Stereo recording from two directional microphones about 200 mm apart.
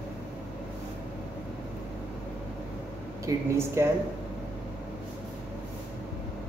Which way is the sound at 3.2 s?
15° right (ahead or behind).